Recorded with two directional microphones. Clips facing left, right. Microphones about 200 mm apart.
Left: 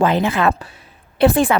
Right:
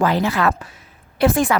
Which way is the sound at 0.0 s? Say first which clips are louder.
Left 2 dB; 20° left (ahead or behind).